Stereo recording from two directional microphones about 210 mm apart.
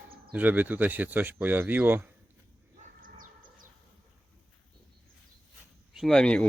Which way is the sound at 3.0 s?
40° right (ahead or behind).